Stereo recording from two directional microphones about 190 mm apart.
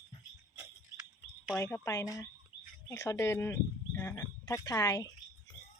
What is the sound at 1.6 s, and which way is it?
A man's voice, 15° left (ahead or behind).